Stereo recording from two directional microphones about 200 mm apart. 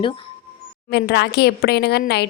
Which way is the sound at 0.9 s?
55° left (ahead or behind).